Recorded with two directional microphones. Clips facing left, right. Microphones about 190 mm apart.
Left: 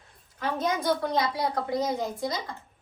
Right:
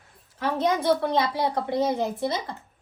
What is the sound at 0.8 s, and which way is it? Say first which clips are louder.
Speech: right 3 dB; 25° right (ahead or behind).